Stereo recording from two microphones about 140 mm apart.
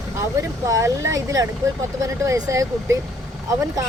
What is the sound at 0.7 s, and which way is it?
Speech, 20° right (ahead or behind).